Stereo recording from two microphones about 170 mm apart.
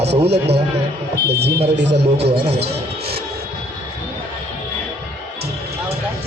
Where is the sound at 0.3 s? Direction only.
75° right (ahead or behind).